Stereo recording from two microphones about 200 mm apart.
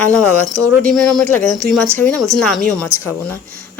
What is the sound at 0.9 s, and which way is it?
Speech, centre (ahead or behind).